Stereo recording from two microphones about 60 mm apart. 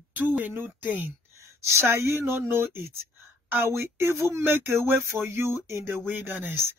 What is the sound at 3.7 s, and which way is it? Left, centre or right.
Speech, right.